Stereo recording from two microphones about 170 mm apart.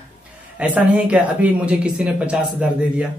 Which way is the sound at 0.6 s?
10° right (ahead or behind).